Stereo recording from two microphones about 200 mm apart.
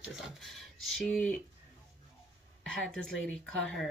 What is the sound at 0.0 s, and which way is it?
Speech, centre (ahead or behind).